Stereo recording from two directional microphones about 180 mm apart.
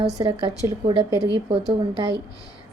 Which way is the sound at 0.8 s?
30° right (ahead or behind).